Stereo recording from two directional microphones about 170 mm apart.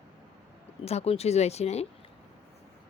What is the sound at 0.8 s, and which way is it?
Speech, 35° left (ahead or behind).